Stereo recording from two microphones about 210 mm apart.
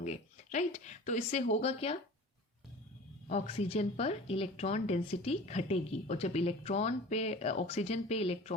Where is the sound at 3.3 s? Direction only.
30° left (ahead or behind).